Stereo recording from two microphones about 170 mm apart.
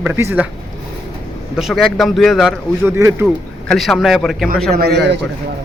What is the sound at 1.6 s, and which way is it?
Speech, centre (ahead or behind).